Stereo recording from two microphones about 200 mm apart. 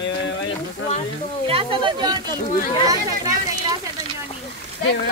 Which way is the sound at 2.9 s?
15° right (ahead or behind).